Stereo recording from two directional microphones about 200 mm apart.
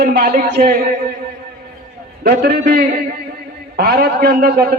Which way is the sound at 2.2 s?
55° right (ahead or behind).